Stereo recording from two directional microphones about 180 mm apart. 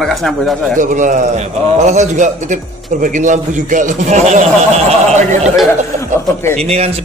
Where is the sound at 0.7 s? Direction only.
45° right (ahead or behind).